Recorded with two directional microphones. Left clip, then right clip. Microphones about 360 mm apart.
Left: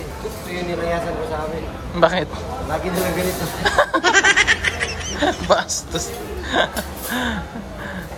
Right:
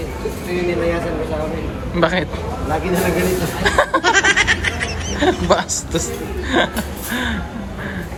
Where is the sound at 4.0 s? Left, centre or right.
Centre.